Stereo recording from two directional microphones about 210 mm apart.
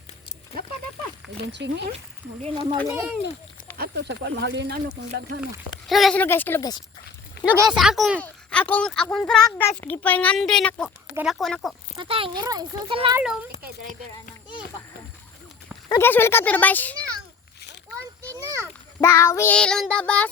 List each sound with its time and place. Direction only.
1.5 s speech: 55° right (ahead or behind)
2.4 s a child's voice: 25° right (ahead or behind)
2.8 s speech: 15° right (ahead or behind)
3.8 s speech: 55° right (ahead or behind)
5.9 s child singing: centre (ahead or behind)
7.4 s speech: 10° right (ahead or behind)
11.9 s a child's voice: 25° right (ahead or behind)
13.1 s speech: 5° right (ahead or behind)
15.9 s child singing: 10° left (ahead or behind)
18.2 s children playing: 15° right (ahead or behind)
18.9 s child singing: 15° left (ahead or behind)